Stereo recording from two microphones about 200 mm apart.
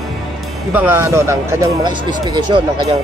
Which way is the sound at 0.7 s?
10° right (ahead or behind).